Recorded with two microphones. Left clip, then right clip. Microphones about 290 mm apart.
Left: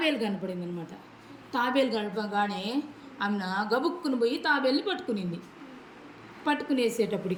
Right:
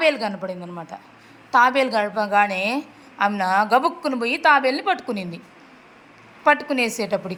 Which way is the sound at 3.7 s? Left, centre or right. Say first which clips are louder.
Right 9 dB; right.